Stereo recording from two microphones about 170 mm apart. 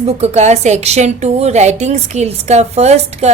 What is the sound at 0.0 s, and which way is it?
A woman's voice, 40° right (ahead or behind).